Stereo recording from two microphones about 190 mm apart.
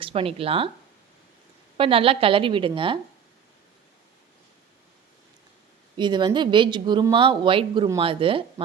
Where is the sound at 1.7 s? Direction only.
30° right (ahead or behind).